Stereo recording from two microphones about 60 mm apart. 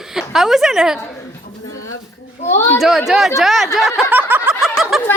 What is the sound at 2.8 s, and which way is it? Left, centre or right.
Speech, centre.